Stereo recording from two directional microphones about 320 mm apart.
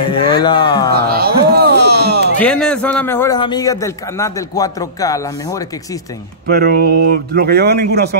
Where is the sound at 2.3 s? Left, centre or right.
Centre.